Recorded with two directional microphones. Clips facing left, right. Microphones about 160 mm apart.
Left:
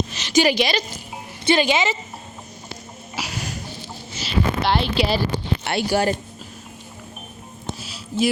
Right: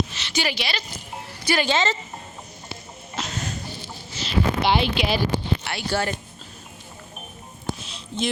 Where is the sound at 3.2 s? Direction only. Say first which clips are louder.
Even; 10° left (ahead or behind).